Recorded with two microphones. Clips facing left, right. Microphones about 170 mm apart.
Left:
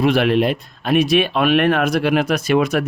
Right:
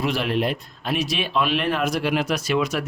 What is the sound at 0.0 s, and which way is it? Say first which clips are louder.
Speech: left 7 dB; 60° left (ahead or behind).